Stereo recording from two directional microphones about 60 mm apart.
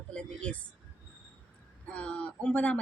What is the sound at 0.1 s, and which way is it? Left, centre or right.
Speech, centre.